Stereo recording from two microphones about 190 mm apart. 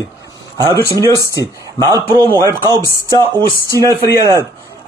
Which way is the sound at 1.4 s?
20° right (ahead or behind).